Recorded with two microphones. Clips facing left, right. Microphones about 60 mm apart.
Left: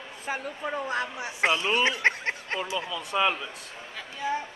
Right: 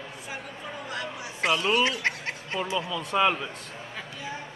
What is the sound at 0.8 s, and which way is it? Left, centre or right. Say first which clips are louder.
A woman's voice: left 4 dB; left.